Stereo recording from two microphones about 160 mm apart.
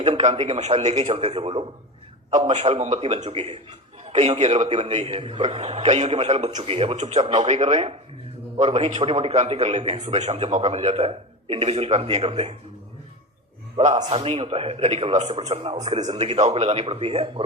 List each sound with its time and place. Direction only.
0.0 s a man's voice: 45° right (ahead or behind)
13.7 s a man's voice: 40° right (ahead or behind)